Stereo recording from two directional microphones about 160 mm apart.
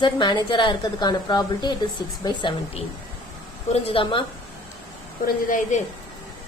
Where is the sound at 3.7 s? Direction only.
35° left (ahead or behind).